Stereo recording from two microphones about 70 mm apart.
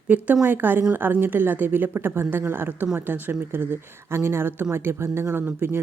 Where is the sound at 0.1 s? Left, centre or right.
Right.